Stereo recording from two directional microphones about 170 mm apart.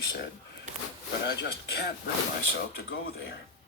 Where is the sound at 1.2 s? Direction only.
70° left (ahead or behind).